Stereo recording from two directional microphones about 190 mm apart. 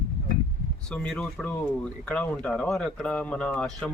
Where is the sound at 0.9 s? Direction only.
5° left (ahead or behind).